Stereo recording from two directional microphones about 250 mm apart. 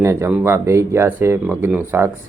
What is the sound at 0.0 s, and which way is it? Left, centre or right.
Speech, centre.